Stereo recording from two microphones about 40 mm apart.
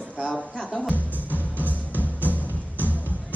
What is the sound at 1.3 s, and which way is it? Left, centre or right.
Music, left.